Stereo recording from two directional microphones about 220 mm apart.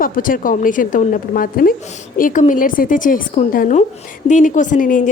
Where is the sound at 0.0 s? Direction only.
40° left (ahead or behind).